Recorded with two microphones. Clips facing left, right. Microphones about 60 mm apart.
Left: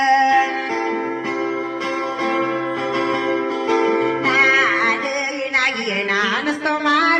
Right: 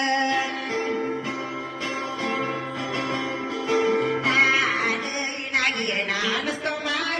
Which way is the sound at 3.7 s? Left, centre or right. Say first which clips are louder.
Left 4 dB; left.